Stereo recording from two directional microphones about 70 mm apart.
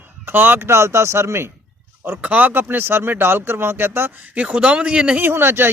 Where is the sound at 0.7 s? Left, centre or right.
Right.